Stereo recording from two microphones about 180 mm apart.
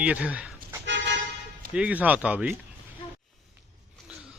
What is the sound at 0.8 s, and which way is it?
Car, 80° right.